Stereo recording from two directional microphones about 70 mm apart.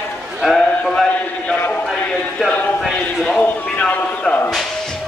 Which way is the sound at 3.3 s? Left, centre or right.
Centre.